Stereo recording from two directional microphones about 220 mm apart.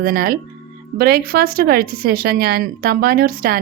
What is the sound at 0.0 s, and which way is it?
A woman's voice, 40° right (ahead or behind).